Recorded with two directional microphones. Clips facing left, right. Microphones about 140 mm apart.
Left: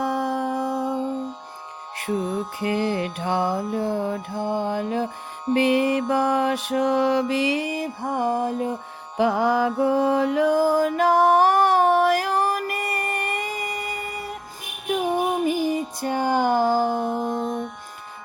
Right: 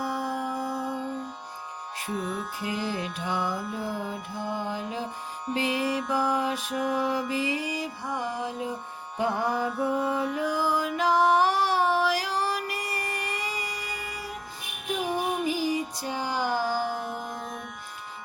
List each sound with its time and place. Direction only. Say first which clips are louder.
0.0 s music: left 6 dB; 60° left (ahead or behind)
2.6 s mantra: left 9 dB; 65° left (ahead or behind)
9.1 s music: left 7 dB; 90° left; by 17.4 s 50° left (ahead or behind)
17.4 s music: left 11 dB; 30° left (ahead or behind)